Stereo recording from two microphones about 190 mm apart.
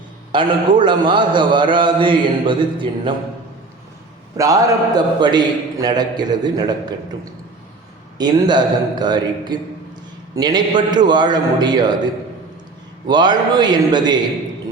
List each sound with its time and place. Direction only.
0.3 s a man's voice: 25° right (ahead or behind)
4.4 s a man's voice: 15° right (ahead or behind)
8.2 s a man's voice: 20° right (ahead or behind)
13.1 s a man's voice: 20° right (ahead or behind)